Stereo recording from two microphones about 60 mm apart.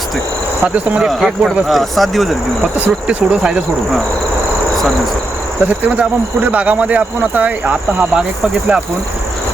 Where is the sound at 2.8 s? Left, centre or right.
Right.